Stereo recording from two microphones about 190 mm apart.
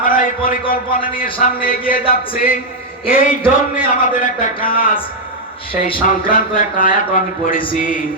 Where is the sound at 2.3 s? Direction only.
45° left (ahead or behind).